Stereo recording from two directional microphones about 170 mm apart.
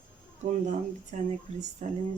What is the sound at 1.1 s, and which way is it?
Speech, 45° right (ahead or behind).